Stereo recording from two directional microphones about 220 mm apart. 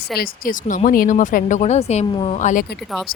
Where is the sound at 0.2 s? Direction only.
40° left (ahead or behind).